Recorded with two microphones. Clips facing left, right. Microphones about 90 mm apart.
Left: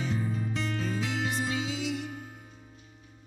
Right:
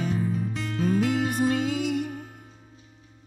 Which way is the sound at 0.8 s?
50° right (ahead or behind).